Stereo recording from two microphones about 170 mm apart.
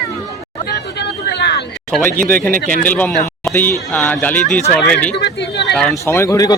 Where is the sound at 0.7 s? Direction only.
75° left (ahead or behind).